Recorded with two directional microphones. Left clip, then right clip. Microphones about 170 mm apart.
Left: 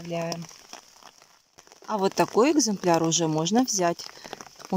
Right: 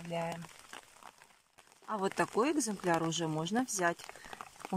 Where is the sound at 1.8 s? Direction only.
20° left (ahead or behind).